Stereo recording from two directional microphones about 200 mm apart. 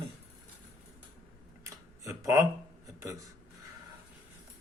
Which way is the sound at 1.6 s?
15° right (ahead or behind).